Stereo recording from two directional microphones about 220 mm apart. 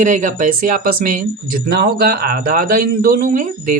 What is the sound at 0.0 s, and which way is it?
Speech, 35° right (ahead or behind).